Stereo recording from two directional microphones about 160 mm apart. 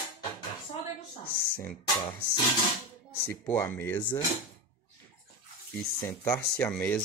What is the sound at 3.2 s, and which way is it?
Speech, 15° left (ahead or behind).